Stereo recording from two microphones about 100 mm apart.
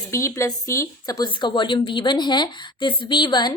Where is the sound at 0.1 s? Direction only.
30° left (ahead or behind).